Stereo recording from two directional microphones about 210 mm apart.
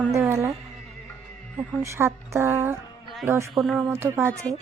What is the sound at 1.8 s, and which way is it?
A man's voice, 10° right (ahead or behind).